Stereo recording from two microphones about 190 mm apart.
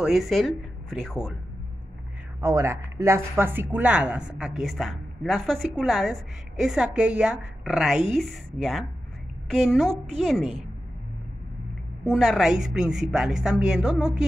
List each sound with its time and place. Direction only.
0.0 s speech: centre (ahead or behind)
2.4 s speech: 15° right (ahead or behind)
12.1 s speech: centre (ahead or behind)